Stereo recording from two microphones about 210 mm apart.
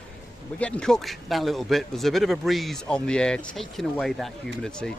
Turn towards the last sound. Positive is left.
turn(degrees=5)  # may be behind; listen again after turning